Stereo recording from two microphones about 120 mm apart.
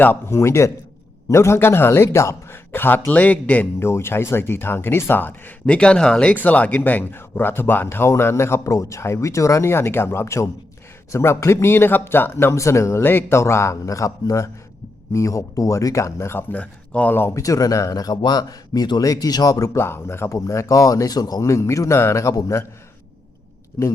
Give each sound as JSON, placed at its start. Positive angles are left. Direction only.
{"t": 0.0, "sound": "speech", "side_deg": 20}
{"t": 23.8, "sound": "speech", "side_deg": 30}